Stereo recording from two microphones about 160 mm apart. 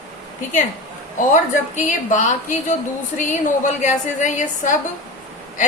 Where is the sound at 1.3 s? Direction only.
50° left (ahead or behind).